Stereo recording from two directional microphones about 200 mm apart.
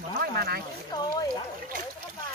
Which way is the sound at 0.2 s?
50° right (ahead or behind).